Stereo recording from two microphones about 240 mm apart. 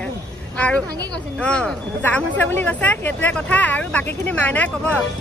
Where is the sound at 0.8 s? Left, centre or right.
Centre.